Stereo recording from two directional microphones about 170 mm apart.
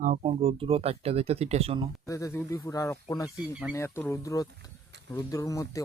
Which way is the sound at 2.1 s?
15° left (ahead or behind).